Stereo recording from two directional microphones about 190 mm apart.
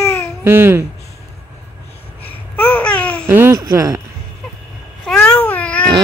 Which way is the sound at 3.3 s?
15° right (ahead or behind).